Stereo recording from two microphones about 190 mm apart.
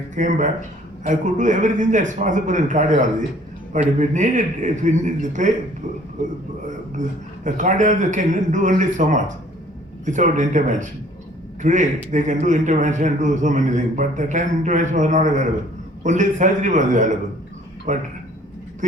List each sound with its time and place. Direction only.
0.2 s a man's voice: 40° right (ahead or behind)
6.9 s a man's voice: 40° right (ahead or behind)